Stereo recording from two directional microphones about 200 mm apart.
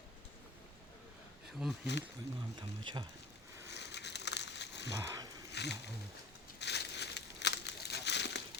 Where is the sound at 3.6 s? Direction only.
60° left (ahead or behind).